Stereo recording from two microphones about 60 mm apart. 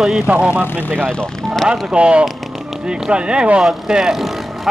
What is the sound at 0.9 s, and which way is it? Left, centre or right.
Speech, centre.